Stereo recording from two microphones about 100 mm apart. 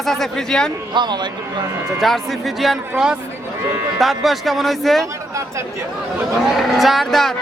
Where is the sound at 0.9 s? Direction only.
50° right (ahead or behind).